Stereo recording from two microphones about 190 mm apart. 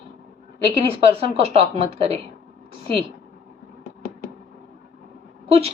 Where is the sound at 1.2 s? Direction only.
30° right (ahead or behind).